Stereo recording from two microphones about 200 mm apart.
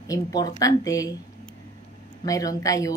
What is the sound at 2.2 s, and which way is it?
Speech, 15° left (ahead or behind).